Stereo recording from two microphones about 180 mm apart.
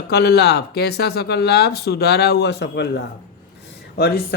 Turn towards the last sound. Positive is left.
turn(degrees=65)  # may be behind; listen again after turning